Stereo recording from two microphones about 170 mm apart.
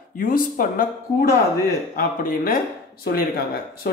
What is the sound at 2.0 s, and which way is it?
Speech, 60° left (ahead or behind).